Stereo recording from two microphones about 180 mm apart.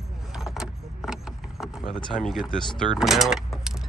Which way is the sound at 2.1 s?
Centre (ahead or behind).